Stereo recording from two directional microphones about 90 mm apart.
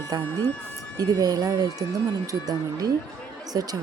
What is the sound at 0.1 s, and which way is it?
Speech, 45° right (ahead or behind).